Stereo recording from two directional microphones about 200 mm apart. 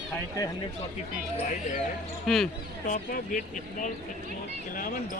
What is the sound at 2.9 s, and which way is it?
Speech, 40° left (ahead or behind).